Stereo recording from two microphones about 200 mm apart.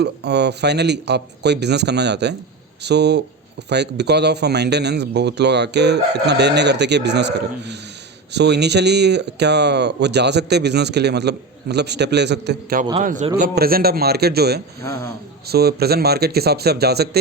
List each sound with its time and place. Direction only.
0.0 s speech: 55° right (ahead or behind)
13.0 s a man's voice: 40° right (ahead or behind)
13.6 s speech: 50° right (ahead or behind)
14.8 s speech: 15° left (ahead or behind)
15.4 s speech: 50° right (ahead or behind)